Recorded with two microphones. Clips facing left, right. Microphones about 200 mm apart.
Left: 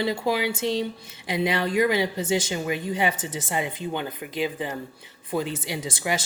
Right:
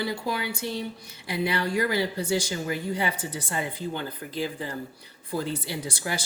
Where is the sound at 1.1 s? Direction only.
20° left (ahead or behind).